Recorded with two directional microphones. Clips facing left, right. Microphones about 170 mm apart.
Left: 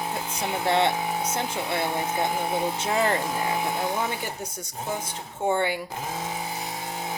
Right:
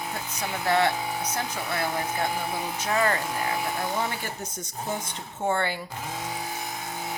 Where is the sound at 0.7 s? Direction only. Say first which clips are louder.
Even; 25° left (ahead or behind).